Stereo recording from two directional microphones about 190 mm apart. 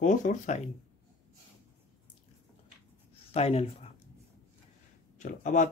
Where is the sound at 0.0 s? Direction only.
40° left (ahead or behind).